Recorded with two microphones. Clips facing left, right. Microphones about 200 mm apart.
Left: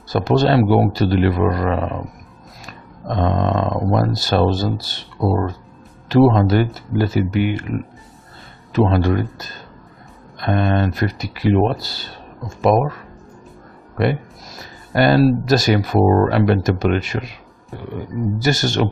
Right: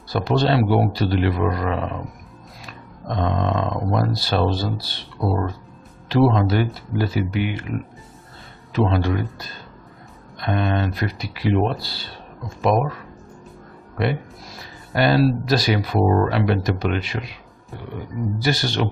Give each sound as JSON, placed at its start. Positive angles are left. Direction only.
{"t": 0.1, "sound": "speech", "side_deg": 45}
{"t": 3.2, "sound": "speech", "side_deg": 50}
{"t": 8.7, "sound": "speech", "side_deg": 50}
{"t": 10.4, "sound": "speech", "side_deg": 50}
{"t": 13.9, "sound": "speech", "side_deg": 45}
{"t": 18.4, "sound": "speech", "side_deg": 45}